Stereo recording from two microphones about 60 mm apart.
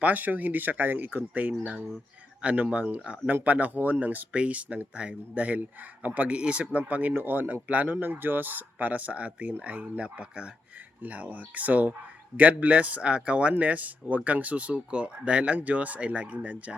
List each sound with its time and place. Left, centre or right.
0.0 s speech: right